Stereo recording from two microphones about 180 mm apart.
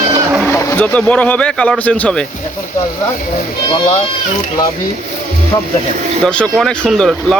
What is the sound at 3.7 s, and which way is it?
Speech, 20° left (ahead or behind).